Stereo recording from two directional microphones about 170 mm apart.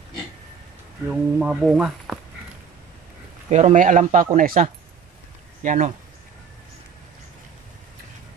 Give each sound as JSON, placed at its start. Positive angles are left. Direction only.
{"t": 1.0, "sound": "speech", "side_deg": -5}
{"t": 3.4, "sound": "speech", "side_deg": -40}